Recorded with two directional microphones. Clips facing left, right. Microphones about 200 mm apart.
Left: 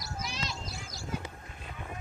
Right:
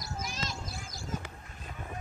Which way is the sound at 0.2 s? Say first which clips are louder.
Even; 45° right (ahead or behind).